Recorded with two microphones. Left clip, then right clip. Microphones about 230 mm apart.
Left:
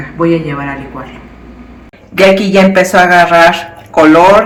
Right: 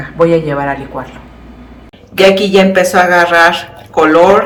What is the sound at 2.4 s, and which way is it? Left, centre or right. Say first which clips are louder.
A woman's voice: left 1 dB; centre.